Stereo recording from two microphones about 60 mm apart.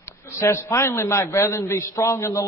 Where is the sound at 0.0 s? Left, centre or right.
Left.